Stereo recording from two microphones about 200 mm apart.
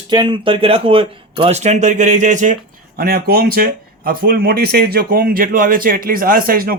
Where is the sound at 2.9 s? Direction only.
50° right (ahead or behind).